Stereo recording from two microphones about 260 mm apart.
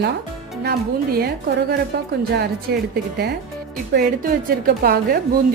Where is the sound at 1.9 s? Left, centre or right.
Right.